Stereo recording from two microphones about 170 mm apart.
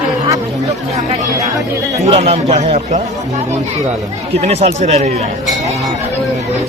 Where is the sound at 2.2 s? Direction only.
40° right (ahead or behind).